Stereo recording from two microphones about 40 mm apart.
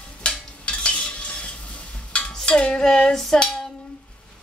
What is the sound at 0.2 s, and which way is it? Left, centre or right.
Stir, left.